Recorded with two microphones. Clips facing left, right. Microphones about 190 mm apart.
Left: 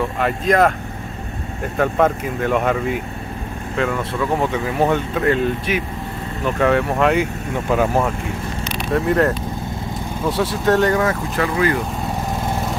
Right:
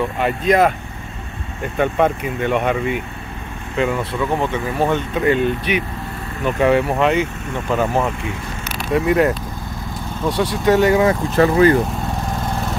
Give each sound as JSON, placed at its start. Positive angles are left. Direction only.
{"t": 0.0, "sound": "speech", "side_deg": 0}
{"t": 1.8, "sound": "speech", "side_deg": 0}
{"t": 4.4, "sound": "speech", "side_deg": 5}
{"t": 8.6, "sound": "speech", "side_deg": -5}
{"t": 11.3, "sound": "speech", "side_deg": -30}